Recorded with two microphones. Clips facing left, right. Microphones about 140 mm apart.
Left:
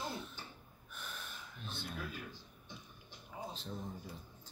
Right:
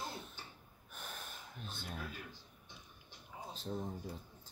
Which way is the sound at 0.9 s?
45° right (ahead or behind).